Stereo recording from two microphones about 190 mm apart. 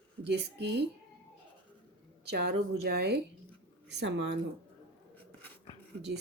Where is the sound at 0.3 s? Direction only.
60° right (ahead or behind).